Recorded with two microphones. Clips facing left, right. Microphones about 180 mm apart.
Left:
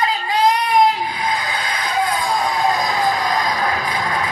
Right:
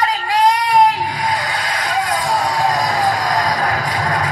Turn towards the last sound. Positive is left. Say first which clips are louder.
# right 2 dB
turn(degrees=-40)  # may be behind; listen again after turning